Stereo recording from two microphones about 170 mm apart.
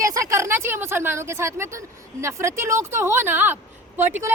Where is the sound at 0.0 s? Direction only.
20° right (ahead or behind).